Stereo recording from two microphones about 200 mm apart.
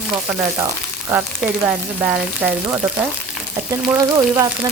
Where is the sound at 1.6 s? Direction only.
5° right (ahead or behind).